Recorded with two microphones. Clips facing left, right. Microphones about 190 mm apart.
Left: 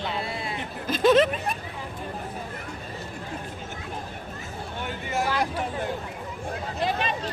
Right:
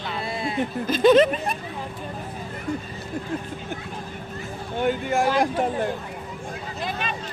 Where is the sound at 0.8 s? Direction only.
Centre (ahead or behind).